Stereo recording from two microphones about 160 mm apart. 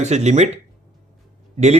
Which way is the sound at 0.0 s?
45° right (ahead or behind).